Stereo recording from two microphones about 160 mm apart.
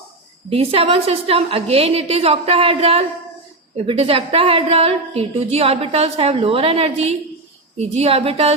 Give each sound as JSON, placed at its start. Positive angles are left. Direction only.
{"t": 0.5, "sound": "a woman's voice", "side_deg": -40}